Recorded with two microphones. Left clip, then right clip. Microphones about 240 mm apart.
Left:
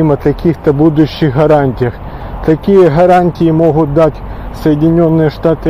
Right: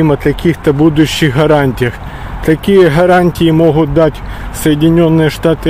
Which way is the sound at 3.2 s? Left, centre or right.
Right.